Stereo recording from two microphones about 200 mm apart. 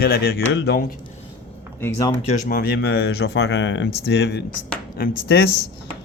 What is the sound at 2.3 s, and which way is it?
Speech, 45° left (ahead or behind).